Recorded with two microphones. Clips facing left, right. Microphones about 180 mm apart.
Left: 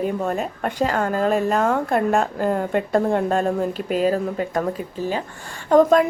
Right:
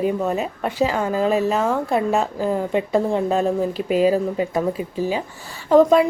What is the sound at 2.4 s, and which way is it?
Speech, 55° left (ahead or behind).